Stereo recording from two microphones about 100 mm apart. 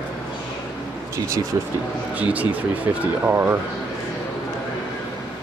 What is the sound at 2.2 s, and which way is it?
Speech, 15° right (ahead or behind).